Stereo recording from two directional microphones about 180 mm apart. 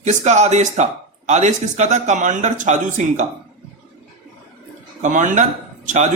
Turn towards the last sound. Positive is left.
turn(degrees=-45)  # may be behind; listen again after turning